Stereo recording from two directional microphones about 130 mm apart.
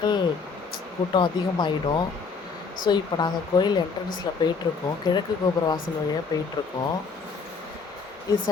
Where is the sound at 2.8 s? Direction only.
30° left (ahead or behind).